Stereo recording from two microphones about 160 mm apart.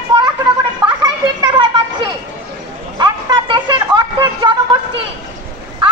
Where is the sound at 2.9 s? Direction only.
30° right (ahead or behind).